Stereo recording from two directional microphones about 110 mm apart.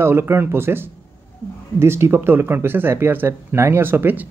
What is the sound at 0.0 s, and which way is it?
Speech, 20° right (ahead or behind).